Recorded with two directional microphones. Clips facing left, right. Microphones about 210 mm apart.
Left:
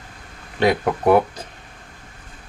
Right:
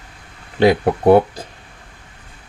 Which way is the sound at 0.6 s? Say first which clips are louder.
Right 5 dB; 30° right (ahead or behind).